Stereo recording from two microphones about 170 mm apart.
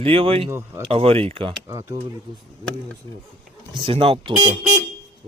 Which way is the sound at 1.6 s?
15° right (ahead or behind).